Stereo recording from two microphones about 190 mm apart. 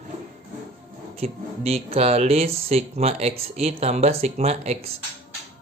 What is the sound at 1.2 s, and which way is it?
Speech, 30° right (ahead or behind).